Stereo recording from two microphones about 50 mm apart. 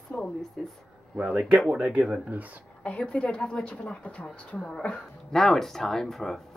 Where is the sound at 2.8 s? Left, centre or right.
Left.